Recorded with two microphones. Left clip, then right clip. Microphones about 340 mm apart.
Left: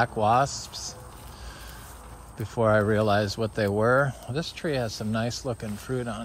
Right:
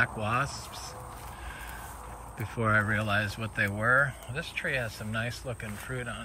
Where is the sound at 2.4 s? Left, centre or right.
Centre.